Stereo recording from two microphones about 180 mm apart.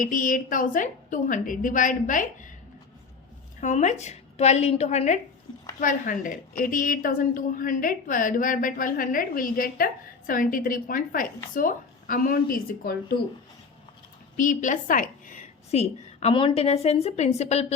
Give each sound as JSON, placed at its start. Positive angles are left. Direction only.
{"t": 0.0, "sound": "a woman's voice", "side_deg": 50}
{"t": 3.6, "sound": "a woman's voice", "side_deg": 40}
{"t": 14.3, "sound": "a woman's voice", "side_deg": 45}